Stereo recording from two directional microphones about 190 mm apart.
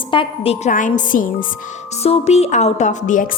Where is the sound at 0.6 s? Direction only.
40° left (ahead or behind).